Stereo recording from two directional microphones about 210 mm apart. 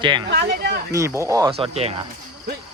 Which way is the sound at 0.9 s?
15° right (ahead or behind).